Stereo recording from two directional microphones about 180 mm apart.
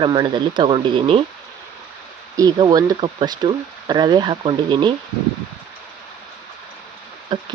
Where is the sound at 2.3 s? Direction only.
20° right (ahead or behind).